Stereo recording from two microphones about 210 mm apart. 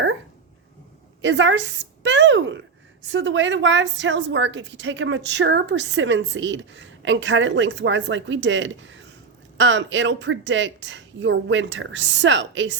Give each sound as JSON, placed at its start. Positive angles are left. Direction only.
{"t": 1.2, "sound": "a woman's voice", "side_deg": -60}